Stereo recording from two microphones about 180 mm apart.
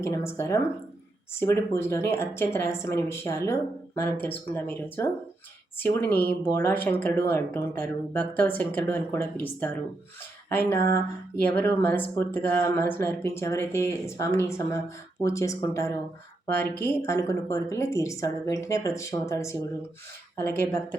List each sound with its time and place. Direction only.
0.0 s speech: 15° left (ahead or behind)